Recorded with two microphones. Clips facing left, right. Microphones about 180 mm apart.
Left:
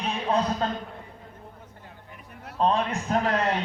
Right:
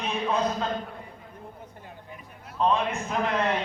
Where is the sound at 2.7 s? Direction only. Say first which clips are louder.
Left 1 dB; 35° left (ahead or behind).